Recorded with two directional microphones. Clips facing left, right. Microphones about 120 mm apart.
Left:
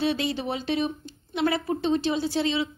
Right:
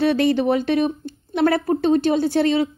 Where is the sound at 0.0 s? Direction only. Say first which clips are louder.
Right 9 dB; 55° right (ahead or behind).